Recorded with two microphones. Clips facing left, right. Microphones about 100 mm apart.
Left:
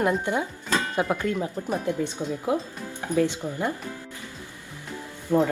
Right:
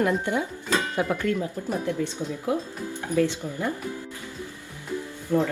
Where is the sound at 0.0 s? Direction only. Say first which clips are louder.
Even; 20° left (ahead or behind).